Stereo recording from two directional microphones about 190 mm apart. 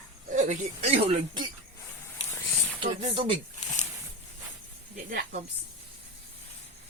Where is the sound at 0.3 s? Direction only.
40° right (ahead or behind).